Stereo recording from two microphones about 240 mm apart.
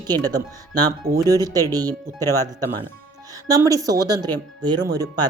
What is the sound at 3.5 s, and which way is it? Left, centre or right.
A woman's voice, centre.